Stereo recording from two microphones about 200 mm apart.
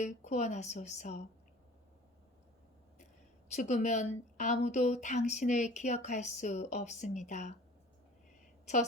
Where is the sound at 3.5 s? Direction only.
35° left (ahead or behind).